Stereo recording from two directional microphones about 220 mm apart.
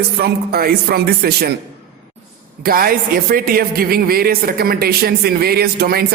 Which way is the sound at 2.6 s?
40° right (ahead or behind).